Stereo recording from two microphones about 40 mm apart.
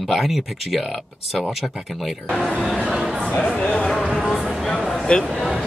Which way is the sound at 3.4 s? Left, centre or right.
Centre.